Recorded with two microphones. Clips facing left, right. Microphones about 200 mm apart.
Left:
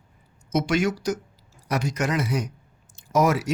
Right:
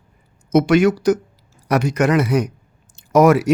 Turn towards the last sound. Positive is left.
turn(degrees=-60)  # may be behind; listen again after turning